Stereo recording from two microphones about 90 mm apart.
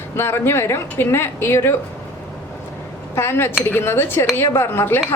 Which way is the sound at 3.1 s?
25° left (ahead or behind).